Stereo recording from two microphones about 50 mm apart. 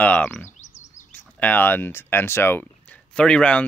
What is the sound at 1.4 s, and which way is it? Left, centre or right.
Speech, left.